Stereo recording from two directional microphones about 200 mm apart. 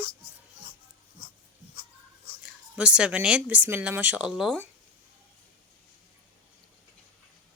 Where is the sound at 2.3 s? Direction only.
50° left (ahead or behind).